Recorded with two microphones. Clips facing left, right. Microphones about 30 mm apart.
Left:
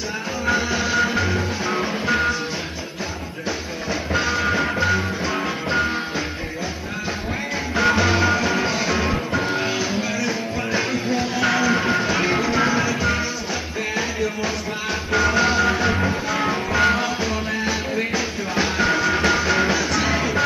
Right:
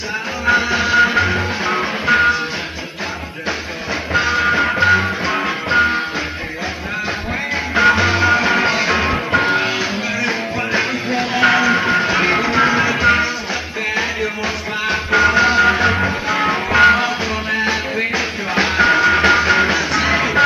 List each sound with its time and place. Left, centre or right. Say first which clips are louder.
0.5 s music: right 6 dB; right
4.1 s music: right 6 dB; right
7.7 s music: right 5 dB; right